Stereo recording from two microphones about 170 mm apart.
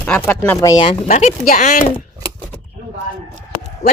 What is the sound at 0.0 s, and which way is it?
Speech, 5° left (ahead or behind).